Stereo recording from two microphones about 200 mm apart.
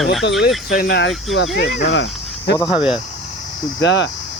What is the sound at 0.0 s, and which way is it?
Speech, centre (ahead or behind).